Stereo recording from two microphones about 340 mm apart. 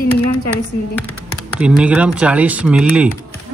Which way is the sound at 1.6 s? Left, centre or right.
Centre.